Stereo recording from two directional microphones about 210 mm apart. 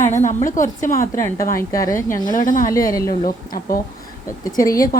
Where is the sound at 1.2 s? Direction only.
15° left (ahead or behind).